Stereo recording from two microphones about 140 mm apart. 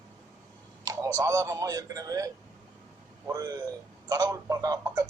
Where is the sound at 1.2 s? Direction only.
20° right (ahead or behind).